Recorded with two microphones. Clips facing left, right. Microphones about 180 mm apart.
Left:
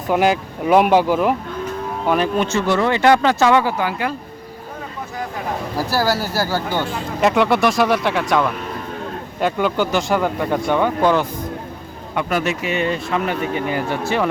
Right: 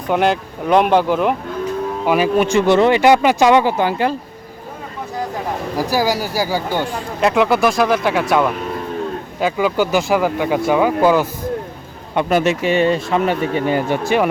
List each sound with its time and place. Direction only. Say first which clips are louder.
0.1 s speech: even; 5° left (ahead or behind)
2.0 s speech: right 3 dB; 5° right (ahead or behind); by 4.1 s 30° right (ahead or behind)
5.7 s speech: right 2 dB; 15° right (ahead or behind)
7.2 s speech: right 1 dB; centre (ahead or behind)
12.1 s speech: right 5 dB; 25° right (ahead or behind)